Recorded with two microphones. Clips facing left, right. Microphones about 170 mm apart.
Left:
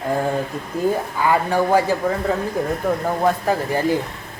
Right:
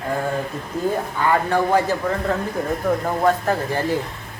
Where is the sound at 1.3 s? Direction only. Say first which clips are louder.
Left 1 dB; 10° left (ahead or behind).